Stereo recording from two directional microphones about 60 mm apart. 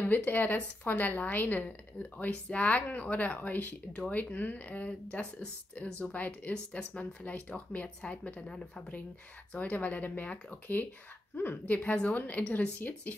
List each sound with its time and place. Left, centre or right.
0.0 s a woman's voice: left
9.5 s a woman's voice: left